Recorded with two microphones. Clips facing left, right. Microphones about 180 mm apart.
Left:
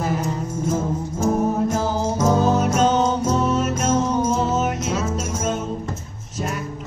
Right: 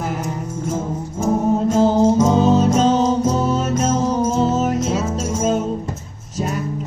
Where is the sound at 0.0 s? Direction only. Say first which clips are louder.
Left 1 dB; 15° right (ahead or behind); by 3.7 s 35° right (ahead or behind).